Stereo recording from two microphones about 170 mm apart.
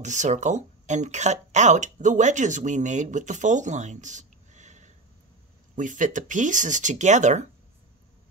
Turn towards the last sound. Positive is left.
turn(degrees=-45)  # may be behind; listen again after turning